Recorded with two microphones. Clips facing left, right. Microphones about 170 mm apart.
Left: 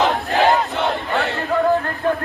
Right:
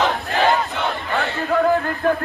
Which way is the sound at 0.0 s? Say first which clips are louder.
Left 2 dB; 20° left (ahead or behind).